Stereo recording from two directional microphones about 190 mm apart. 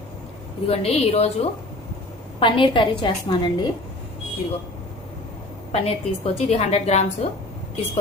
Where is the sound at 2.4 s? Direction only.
25° left (ahead or behind).